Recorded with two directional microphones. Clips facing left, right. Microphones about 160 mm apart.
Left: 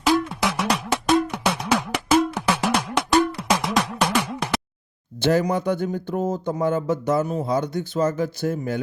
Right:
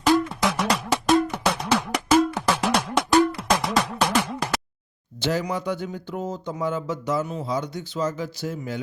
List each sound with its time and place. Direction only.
0.0 s music: centre (ahead or behind)
5.2 s speech: 50° left (ahead or behind)